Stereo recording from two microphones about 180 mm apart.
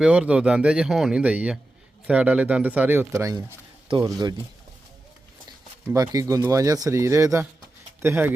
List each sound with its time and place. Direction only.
0.0 s speech: 5° right (ahead or behind); by 4.4 s 25° right (ahead or behind)
5.5 s speech: 20° right (ahead or behind)